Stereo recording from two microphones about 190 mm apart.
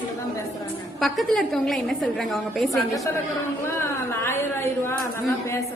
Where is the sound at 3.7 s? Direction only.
15° left (ahead or behind).